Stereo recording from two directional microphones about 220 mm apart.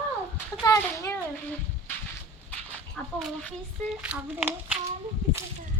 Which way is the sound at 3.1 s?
Centre (ahead or behind).